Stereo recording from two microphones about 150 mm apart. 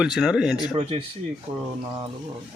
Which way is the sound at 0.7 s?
40° right (ahead or behind).